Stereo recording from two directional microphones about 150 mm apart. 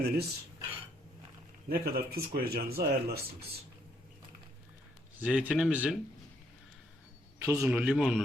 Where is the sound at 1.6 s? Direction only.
90° right.